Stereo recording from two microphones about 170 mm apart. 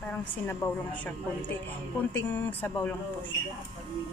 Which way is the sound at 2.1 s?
10° left (ahead or behind).